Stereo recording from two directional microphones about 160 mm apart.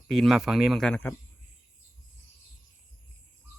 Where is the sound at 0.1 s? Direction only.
Centre (ahead or behind).